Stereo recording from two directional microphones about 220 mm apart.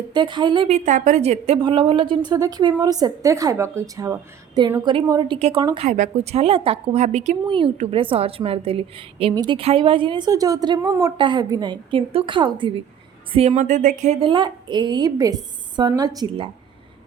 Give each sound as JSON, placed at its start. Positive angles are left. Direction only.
{"t": 0.1, "sound": "a woman's voice", "side_deg": -20}